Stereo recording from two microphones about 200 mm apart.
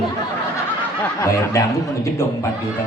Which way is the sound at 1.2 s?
15° left (ahead or behind).